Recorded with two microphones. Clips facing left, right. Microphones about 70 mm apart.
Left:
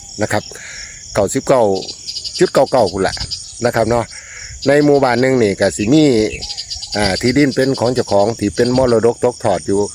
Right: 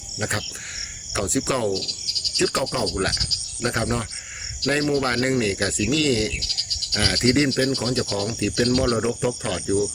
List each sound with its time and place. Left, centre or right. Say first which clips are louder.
0.2 s speech: left 10 dB; left
2.9 s speech: left 8 dB; left